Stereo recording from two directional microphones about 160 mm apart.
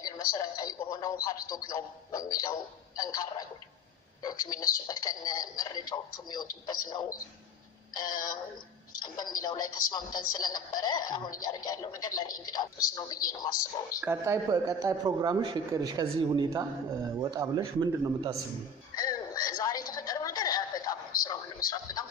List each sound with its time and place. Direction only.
0.0 s a man's voice: 25° left (ahead or behind)
14.0 s a man's voice: 15° right (ahead or behind)
18.9 s music: 25° left (ahead or behind)
19.9 s a sound: 25° left (ahead or behind)